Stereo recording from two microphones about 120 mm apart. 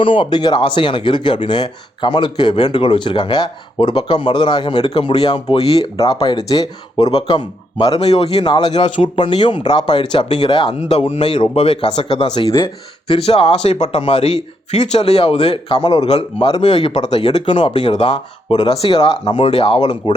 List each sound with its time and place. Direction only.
0.0 s speech: 45° left (ahead or behind)
5.5 s speech: 55° left (ahead or behind)
7.9 s a man's voice: 60° left (ahead or behind)
8.7 s a man's voice: 45° left (ahead or behind)
12.2 s a man's voice: 45° left (ahead or behind)
16.4 s speech: 40° left (ahead or behind)
17.7 s speech: 55° left (ahead or behind)